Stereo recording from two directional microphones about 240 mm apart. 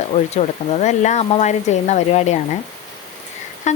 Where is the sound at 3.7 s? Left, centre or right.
Left.